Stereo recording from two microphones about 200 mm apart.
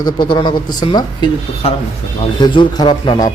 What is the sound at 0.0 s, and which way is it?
Speech, 20° left (ahead or behind).